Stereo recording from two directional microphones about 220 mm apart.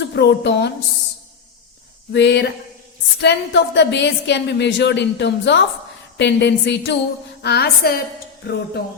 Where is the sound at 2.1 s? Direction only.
50° left (ahead or behind).